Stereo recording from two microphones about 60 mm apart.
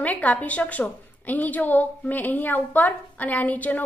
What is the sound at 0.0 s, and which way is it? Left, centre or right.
A woman's voice, left.